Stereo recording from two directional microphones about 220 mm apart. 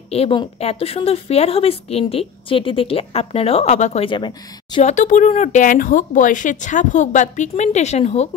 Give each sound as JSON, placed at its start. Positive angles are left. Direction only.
{"t": 0.1, "sound": "speech", "side_deg": 25}